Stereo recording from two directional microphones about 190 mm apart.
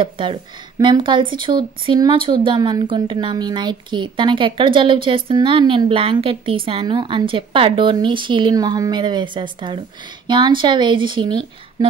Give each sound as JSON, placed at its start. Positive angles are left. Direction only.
{"t": 0.0, "sound": "a woman's voice", "side_deg": -25}